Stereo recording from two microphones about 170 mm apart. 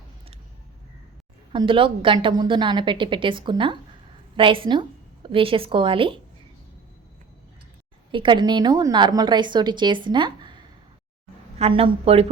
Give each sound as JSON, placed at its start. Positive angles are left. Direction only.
{"t": 1.5, "sound": "a woman's voice", "side_deg": -30}
{"t": 8.1, "sound": "a woman's voice", "side_deg": -30}
{"t": 11.6, "sound": "speech", "side_deg": -35}